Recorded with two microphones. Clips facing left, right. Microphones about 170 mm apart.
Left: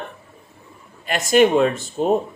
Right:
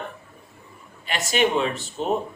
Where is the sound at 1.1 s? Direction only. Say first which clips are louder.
Left 7 dB; 45° left (ahead or behind).